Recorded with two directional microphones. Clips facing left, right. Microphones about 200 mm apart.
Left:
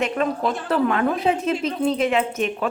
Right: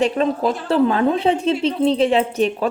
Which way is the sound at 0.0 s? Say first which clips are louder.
Right 4 dB; 30° right (ahead or behind).